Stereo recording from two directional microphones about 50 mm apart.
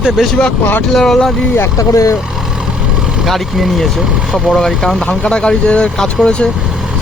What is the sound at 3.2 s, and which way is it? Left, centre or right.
Speech, centre.